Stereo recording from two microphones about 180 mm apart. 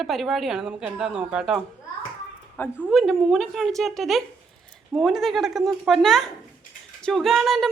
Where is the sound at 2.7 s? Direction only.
5° right (ahead or behind).